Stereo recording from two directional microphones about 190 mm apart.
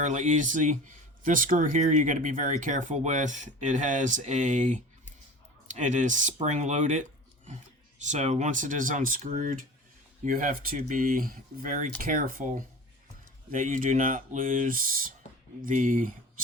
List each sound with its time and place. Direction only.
0.0 s speech: 40° right (ahead or behind)